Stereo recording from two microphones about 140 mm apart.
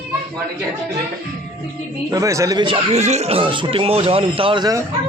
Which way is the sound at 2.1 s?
20° right (ahead or behind).